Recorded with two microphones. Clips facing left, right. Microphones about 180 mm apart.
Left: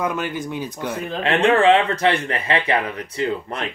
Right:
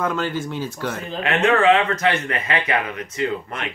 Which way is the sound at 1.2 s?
30° left (ahead or behind).